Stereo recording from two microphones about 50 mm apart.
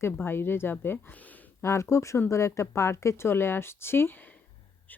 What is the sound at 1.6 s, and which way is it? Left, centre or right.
Speech, left.